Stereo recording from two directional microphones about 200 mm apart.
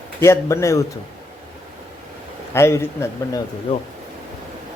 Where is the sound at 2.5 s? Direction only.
15° left (ahead or behind).